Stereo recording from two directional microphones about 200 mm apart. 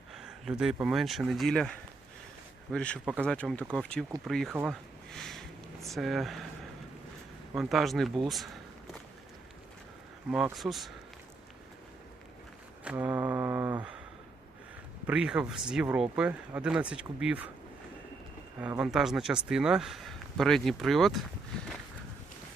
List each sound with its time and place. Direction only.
0.1 s speech: centre (ahead or behind)
2.7 s speech: 5° left (ahead or behind)
7.5 s speech: centre (ahead or behind)
10.3 s speech: centre (ahead or behind)
12.8 s a sound: 5° right (ahead or behind)
15.0 s speech: 5° right (ahead or behind)
18.8 s speech: centre (ahead or behind)